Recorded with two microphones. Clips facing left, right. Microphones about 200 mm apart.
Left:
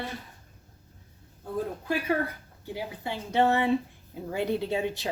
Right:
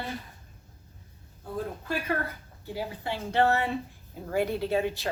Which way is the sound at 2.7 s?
15° left (ahead or behind).